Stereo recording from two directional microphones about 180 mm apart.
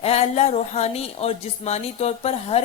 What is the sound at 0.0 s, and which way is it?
Speech, 35° left (ahead or behind).